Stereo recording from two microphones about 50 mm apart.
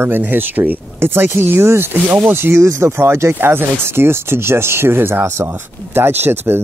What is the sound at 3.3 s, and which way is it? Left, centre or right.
Speech, right.